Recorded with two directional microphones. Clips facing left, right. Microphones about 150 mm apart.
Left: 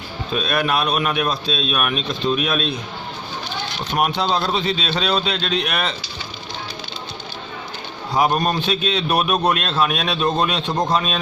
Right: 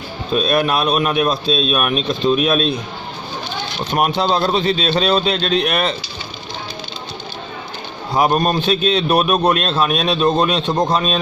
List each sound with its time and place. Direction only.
0.4 s speech: 40° right (ahead or behind)
3.9 s speech: 45° right (ahead or behind)
8.2 s speech: 45° right (ahead or behind)
9.1 s speech: 30° right (ahead or behind)
10.1 s a man's voice: 25° right (ahead or behind)